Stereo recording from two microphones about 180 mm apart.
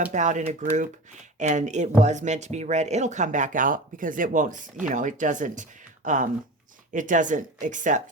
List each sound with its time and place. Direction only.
0.1 s speech: 40° right (ahead or behind)